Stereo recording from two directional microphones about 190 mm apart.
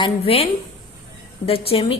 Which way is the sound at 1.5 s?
30° left (ahead or behind).